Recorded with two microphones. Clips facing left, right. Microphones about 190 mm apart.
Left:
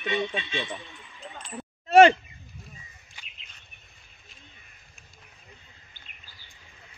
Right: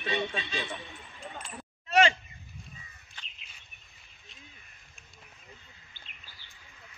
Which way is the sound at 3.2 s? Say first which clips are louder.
Even; 10° left (ahead or behind).